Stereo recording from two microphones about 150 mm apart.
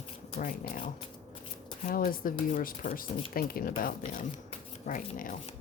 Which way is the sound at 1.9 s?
65° left (ahead or behind).